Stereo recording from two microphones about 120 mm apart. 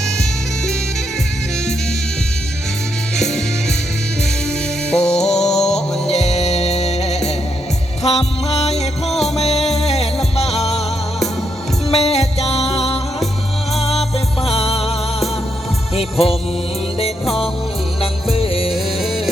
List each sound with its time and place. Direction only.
5.0 s music: 5° left (ahead or behind)
5.3 s music: 65° left (ahead or behind)
9.1 s music: centre (ahead or behind)
9.4 s music: 60° left (ahead or behind)
11.9 s music: 60° left (ahead or behind)
14.4 s music: 55° left (ahead or behind)
16.0 s music: 55° left (ahead or behind)
18.0 s music: 50° left (ahead or behind)
18.7 s music: centre (ahead or behind)